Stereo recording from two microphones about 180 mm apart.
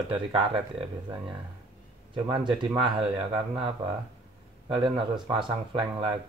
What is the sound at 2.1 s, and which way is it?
Speech, 25° right (ahead or behind).